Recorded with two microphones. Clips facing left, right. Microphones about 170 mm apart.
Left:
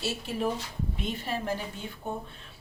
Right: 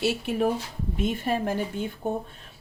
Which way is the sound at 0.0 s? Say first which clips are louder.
Right 7 dB; 60° right (ahead or behind).